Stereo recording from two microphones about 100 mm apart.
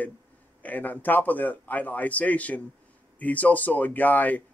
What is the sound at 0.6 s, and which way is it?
Speech, 15° left (ahead or behind).